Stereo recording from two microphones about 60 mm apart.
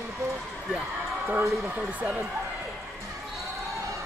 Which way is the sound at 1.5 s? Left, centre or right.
Centre.